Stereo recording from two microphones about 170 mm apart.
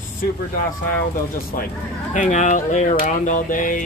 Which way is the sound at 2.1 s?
45° left (ahead or behind).